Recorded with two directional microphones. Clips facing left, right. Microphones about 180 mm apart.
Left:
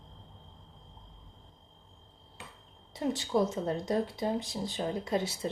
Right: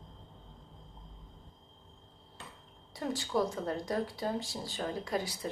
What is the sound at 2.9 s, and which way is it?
Speech, 20° left (ahead or behind).